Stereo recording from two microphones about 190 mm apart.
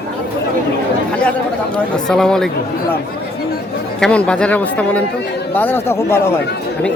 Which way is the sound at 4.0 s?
5° left (ahead or behind).